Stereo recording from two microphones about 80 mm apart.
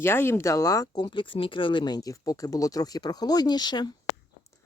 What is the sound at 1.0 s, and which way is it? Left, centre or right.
Speech, left.